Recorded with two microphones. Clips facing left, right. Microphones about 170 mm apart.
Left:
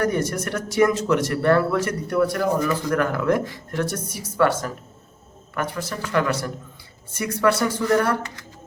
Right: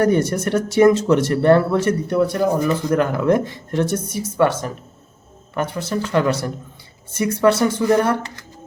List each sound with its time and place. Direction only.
0.0 s speech: 30° right (ahead or behind)